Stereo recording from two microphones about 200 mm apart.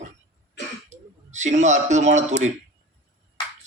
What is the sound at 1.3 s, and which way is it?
Speech, 35° right (ahead or behind).